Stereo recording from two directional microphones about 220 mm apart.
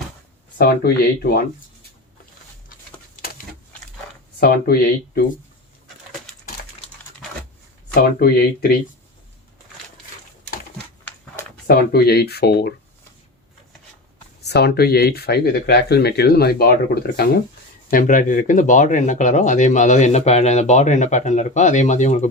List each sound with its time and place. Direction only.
0.8 s speech: 45° left (ahead or behind)
4.4 s speech: 45° left (ahead or behind)
8.2 s speech: 45° left (ahead or behind)
11.7 s speech: 45° left (ahead or behind)
14.4 s speech: 50° left (ahead or behind); by 22.3 s 30° left (ahead or behind)